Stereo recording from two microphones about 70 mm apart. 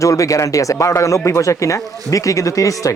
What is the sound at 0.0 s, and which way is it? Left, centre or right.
Speech, left.